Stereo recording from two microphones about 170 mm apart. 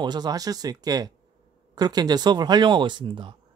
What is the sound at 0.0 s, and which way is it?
Speech, 25° right (ahead or behind).